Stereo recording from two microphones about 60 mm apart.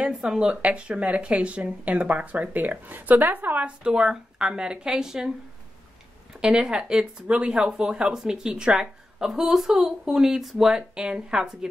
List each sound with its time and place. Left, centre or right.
0.0 s speech: centre; by 3.6 s right
3.6 s speech: centre
6.4 s speech: centre